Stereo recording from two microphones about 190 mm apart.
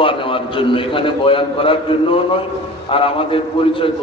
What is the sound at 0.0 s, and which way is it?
A man's voice, 30° left (ahead or behind).